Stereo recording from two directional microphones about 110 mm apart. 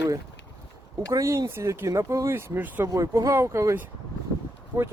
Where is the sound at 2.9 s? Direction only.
30° right (ahead or behind).